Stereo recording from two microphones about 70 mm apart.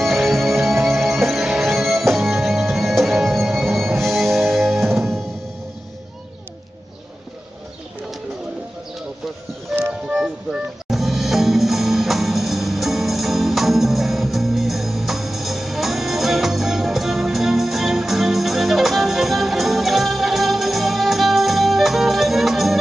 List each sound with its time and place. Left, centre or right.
0.0 s music: centre
9.7 s music: centre